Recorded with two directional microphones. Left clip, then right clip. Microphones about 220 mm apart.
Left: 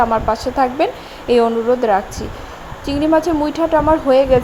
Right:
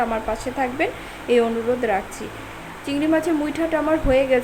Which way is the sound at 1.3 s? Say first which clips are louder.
Left 4 dB; 15° left (ahead or behind).